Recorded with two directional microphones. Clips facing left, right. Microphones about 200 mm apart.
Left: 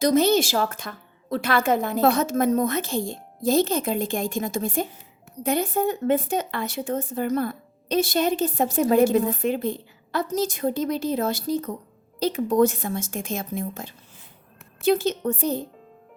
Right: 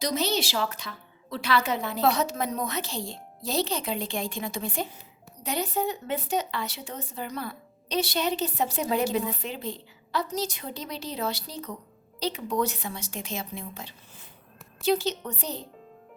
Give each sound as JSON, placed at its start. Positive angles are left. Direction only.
{"t": 0.0, "sound": "speech", "side_deg": 50}